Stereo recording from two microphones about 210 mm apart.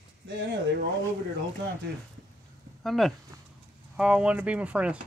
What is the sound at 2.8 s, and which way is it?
Speech, centre (ahead or behind).